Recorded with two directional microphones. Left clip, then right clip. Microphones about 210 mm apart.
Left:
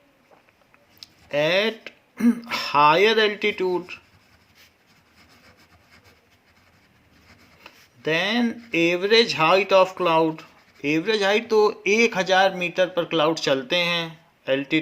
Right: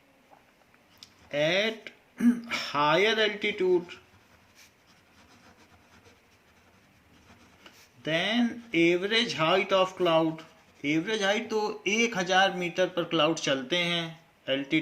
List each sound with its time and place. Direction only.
0.9 s throat clearing: 45° left (ahead or behind)
7.6 s speech: 45° left (ahead or behind)